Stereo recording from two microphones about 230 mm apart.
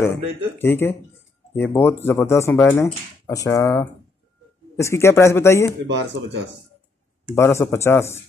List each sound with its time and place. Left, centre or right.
0.0 s speech: centre
5.9 s speech: right
7.3 s speech: centre